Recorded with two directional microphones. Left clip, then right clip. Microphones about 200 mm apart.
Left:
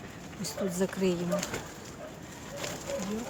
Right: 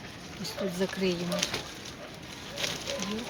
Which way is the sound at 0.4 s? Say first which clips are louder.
Even; 10° left (ahead or behind).